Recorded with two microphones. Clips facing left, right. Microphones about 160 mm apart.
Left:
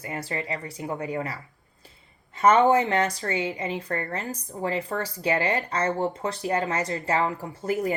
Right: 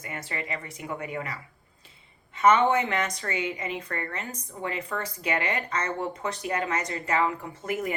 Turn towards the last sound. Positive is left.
turn(degrees=30)  # may be behind; listen again after turning